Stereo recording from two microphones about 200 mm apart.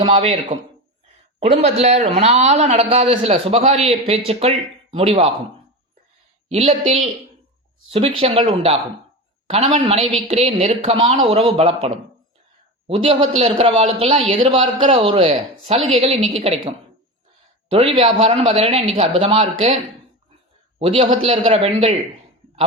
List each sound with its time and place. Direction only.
0.0 s a man's voice: 30° right (ahead or behind)
6.5 s a man's voice: 30° right (ahead or behind)
12.9 s speech: 25° right (ahead or behind)
17.7 s speech: 30° right (ahead or behind)
20.7 s speech: 25° right (ahead or behind)